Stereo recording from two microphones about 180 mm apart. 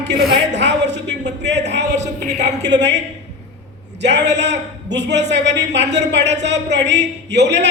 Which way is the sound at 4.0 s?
70° right (ahead or behind).